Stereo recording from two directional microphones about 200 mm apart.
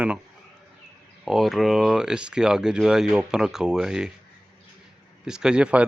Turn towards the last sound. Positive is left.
turn(degrees=-5)  # may be behind; listen again after turning